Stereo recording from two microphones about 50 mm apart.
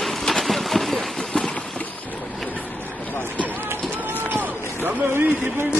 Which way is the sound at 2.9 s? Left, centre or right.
Left.